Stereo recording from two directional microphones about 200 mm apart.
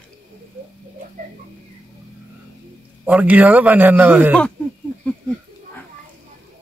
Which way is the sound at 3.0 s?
5° right (ahead or behind).